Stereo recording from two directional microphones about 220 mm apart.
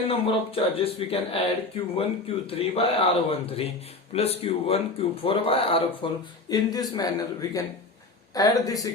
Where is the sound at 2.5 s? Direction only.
25° left (ahead or behind).